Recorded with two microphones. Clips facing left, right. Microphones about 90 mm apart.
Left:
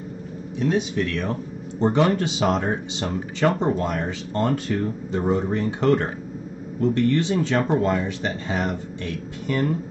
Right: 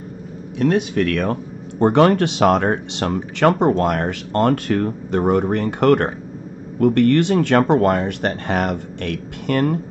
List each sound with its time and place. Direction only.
0.6 s speech: 65° right (ahead or behind)